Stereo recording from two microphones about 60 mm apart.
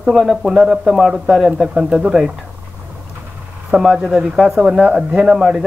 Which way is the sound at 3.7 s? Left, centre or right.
Centre.